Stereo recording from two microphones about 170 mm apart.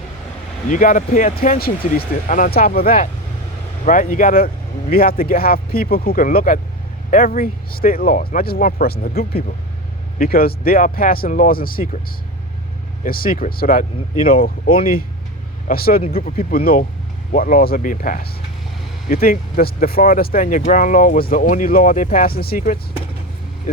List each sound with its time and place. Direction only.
0.7 s speech: 50° left (ahead or behind)
13.1 s speech: 60° left (ahead or behind)